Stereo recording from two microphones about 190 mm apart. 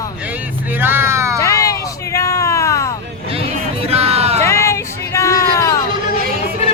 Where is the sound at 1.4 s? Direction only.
15° left (ahead or behind).